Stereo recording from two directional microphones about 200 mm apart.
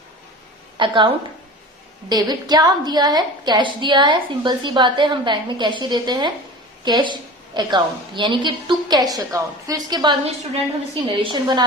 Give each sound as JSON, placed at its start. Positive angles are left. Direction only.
{"t": 0.8, "sound": "a woman's voice", "side_deg": -25}